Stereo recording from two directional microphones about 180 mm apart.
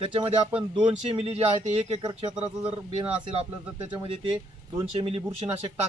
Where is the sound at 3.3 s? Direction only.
30° right (ahead or behind).